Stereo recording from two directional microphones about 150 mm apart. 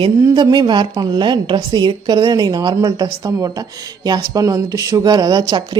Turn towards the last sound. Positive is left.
turn(degrees=-25)  # may be behind; listen again after turning